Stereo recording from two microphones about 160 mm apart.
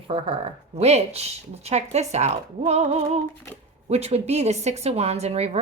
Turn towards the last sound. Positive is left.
turn(degrees=-40)  # may be behind; listen again after turning